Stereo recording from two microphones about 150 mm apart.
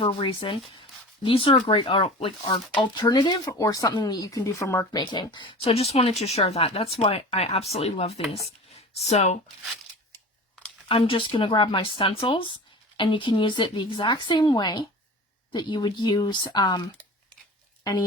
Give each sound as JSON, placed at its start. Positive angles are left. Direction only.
{"t": 0.0, "sound": "speech", "side_deg": 35}
{"t": 4.9, "sound": "speech", "side_deg": 30}
{"t": 10.8, "sound": "speech", "side_deg": 35}